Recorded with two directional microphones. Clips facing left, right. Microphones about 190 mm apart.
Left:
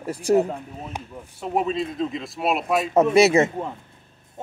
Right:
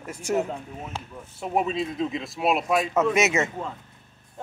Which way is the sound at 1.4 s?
Centre (ahead or behind).